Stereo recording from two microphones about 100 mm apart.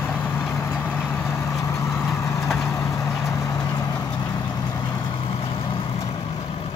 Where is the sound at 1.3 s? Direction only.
35° left (ahead or behind).